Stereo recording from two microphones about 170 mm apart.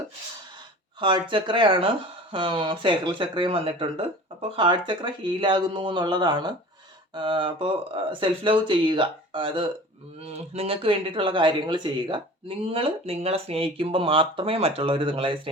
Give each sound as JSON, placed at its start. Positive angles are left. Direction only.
{"t": 0.9, "sound": "speech", "side_deg": -30}